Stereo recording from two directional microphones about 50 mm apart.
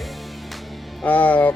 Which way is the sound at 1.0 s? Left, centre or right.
Left.